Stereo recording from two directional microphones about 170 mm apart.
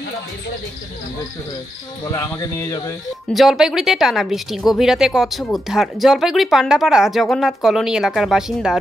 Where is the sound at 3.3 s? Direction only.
Centre (ahead or behind).